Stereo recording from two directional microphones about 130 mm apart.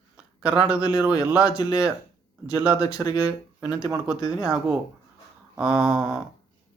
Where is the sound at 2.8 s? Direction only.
20° left (ahead or behind).